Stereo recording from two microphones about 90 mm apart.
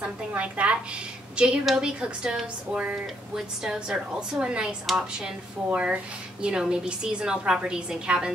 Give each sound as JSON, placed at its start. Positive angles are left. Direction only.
{"t": 0.3, "sound": "a woman's voice", "side_deg": -15}